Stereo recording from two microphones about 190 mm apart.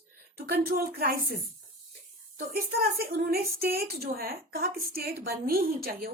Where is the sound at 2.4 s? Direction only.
50° right (ahead or behind).